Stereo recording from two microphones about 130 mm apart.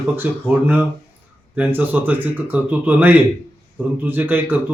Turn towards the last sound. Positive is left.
turn(degrees=-15)  # may be behind; listen again after turning